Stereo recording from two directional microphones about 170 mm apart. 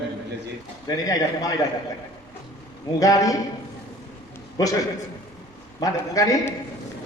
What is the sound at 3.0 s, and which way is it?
Speech, 20° left (ahead or behind).